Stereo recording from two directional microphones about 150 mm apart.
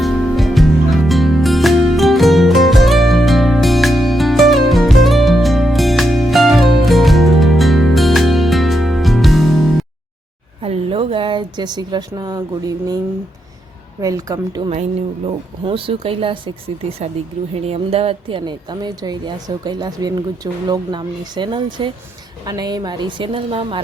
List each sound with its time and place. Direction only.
0.0 s music: centre (ahead or behind)
10.6 s speech: 40° right (ahead or behind)
14.0 s speech: 25° right (ahead or behind)
15.6 s a woman's voice: 35° right (ahead or behind)
17.7 s a woman's voice: 40° right (ahead or behind)